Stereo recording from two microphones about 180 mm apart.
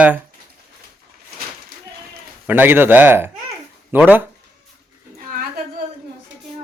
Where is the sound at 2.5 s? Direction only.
10° right (ahead or behind).